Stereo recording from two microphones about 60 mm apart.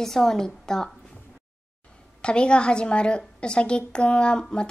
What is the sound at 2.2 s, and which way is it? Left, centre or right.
Speech, centre.